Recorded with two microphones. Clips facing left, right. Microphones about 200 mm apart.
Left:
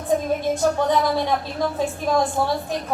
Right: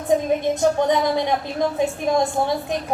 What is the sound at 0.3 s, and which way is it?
A woman's voice, 20° right (ahead or behind).